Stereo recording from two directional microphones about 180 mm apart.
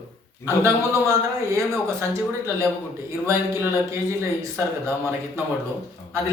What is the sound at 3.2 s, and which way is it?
Speech, 15° right (ahead or behind).